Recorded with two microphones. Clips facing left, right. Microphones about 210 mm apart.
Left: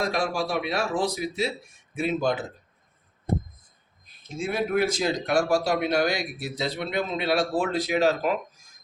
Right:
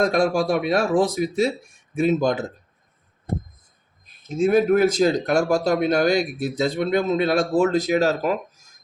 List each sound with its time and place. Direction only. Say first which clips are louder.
0.0 s speech: right 7 dB; 45° right (ahead or behind)
4.5 s speech: right 7 dB; 45° right (ahead or behind)